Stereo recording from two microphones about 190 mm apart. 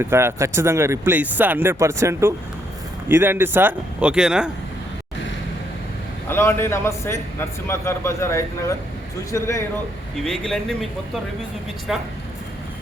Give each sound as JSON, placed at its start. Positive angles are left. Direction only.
{"t": 0.0, "sound": "speech", "side_deg": -15}
{"t": 6.2, "sound": "a man's voice", "side_deg": 15}
{"t": 10.2, "sound": "speech", "side_deg": 0}